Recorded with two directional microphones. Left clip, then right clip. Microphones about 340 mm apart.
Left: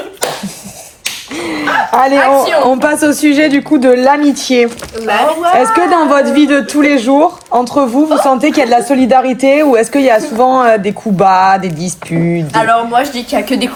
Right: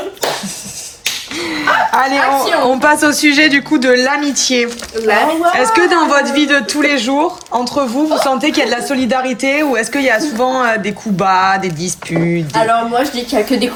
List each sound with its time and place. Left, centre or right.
1.4 s a sound: centre
2.6 s a woman's voice: centre
12.5 s a woman's voice: left